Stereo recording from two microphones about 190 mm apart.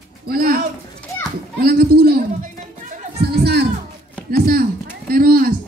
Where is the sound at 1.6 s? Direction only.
55° right (ahead or behind).